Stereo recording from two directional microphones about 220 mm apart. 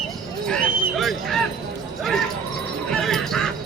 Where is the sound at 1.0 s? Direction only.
Centre (ahead or behind).